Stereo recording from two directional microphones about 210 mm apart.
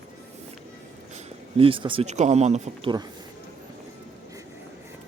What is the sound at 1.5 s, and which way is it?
Speech, 25° right (ahead or behind).